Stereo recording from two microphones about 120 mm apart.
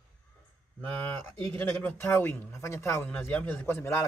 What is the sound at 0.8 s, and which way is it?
Speech, 15° left (ahead or behind).